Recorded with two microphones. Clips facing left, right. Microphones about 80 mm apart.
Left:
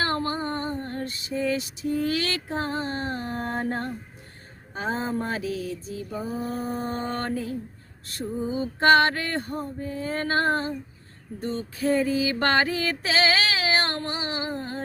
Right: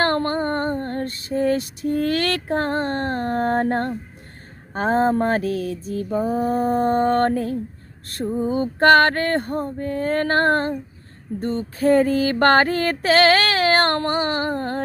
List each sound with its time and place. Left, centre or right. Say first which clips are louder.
0.0 s female singing: right 6 dB; right
11.3 s female singing: right 6 dB; right